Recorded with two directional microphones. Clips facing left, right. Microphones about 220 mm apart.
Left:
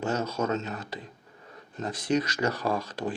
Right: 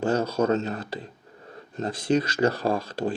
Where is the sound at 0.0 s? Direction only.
30° right (ahead or behind).